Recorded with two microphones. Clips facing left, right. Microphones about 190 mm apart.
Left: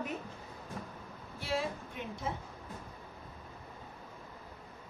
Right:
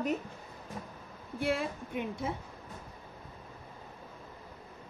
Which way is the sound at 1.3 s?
55° right (ahead or behind).